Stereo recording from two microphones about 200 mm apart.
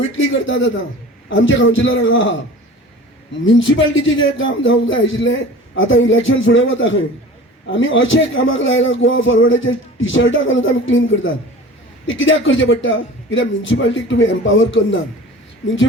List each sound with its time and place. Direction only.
0.2 s a man's voice: 75° left (ahead or behind)
3.4 s a man's voice: 70° left (ahead or behind)